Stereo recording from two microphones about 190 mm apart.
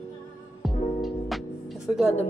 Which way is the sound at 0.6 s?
Centre (ahead or behind).